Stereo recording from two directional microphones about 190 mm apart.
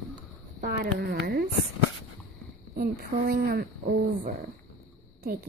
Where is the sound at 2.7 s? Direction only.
50° right (ahead or behind).